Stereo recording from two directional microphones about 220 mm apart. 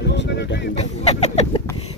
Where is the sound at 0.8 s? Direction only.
30° left (ahead or behind).